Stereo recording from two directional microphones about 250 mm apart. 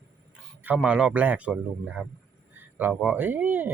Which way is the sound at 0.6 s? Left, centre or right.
Centre.